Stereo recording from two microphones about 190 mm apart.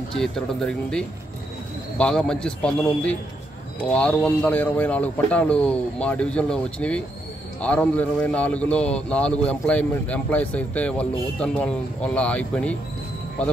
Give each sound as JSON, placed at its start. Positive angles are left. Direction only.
{"t": 0.1, "sound": "a man's voice", "side_deg": 5}